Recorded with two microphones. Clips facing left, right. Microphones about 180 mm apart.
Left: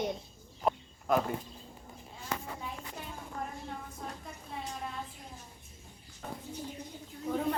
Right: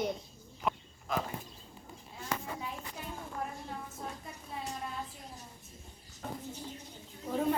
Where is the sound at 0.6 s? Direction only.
40° left (ahead or behind).